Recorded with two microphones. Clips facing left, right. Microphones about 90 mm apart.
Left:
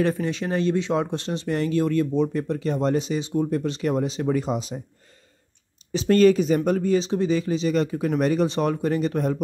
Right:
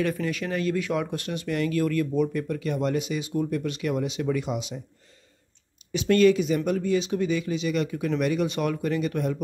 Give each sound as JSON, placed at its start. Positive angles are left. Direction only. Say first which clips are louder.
{"t": 0.0, "sound": "speech", "louder": "left 3 dB", "side_deg": 30}
{"t": 5.9, "sound": "speech", "louder": "left 2 dB", "side_deg": 35}